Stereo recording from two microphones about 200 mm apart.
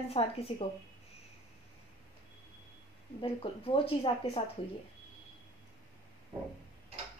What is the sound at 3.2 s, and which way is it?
A woman's voice, 30° left (ahead or behind).